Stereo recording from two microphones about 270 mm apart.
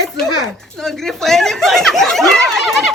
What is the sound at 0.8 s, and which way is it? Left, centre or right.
Snicker, centre.